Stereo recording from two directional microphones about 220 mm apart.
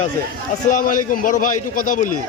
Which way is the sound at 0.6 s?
35° left (ahead or behind).